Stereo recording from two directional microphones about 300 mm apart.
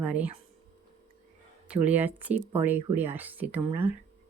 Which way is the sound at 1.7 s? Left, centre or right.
Centre.